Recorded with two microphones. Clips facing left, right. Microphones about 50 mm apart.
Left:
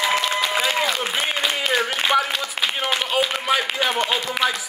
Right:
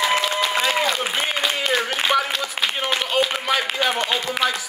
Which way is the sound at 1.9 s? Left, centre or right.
Centre.